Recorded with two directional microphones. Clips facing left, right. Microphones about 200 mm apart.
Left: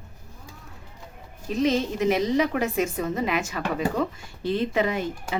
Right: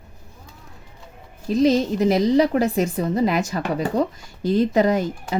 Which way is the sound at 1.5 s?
35° right (ahead or behind).